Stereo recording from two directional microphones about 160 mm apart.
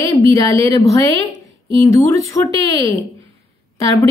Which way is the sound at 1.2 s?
30° right (ahead or behind).